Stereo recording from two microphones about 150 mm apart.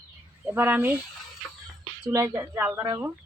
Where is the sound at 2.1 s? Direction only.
20° right (ahead or behind).